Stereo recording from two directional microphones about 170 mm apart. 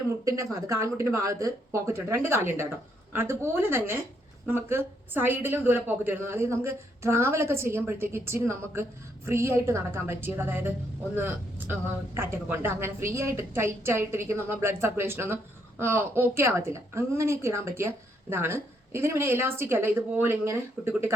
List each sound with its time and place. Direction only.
0.1 s a woman's voice: 20° right (ahead or behind)